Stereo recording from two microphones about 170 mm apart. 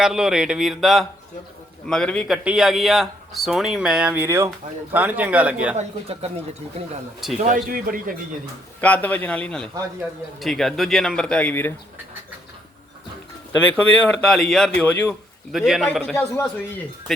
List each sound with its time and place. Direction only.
0.0 s speech: 5° right (ahead or behind)
5.7 s speech: 40° right (ahead or behind)
7.4 s speech: 55° right (ahead or behind)
8.8 s speech: 10° left (ahead or behind)
13.8 s speech: 10° left (ahead or behind)
16.3 s speech: 15° left (ahead or behind)